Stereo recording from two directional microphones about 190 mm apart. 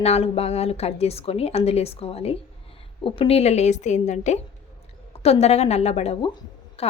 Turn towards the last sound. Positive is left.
turn(degrees=35)  # may be behind; listen again after turning